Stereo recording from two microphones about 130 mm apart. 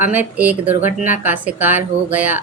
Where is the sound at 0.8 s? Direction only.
80° left.